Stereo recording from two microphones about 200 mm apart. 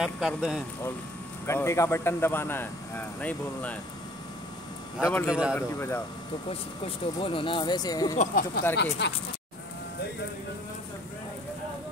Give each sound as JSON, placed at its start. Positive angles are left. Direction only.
{"t": 0.0, "sound": "speech", "side_deg": 0}
{"t": 1.4, "sound": "speech", "side_deg": 15}
{"t": 5.0, "sound": "speech", "side_deg": 10}
{"t": 5.3, "sound": "speech", "side_deg": -5}
{"t": 5.6, "sound": "speech", "side_deg": 10}
{"t": 6.5, "sound": "speech", "side_deg": 30}
{"t": 8.2, "sound": "speech", "side_deg": 45}
{"t": 9.0, "sound": "speech", "side_deg": 60}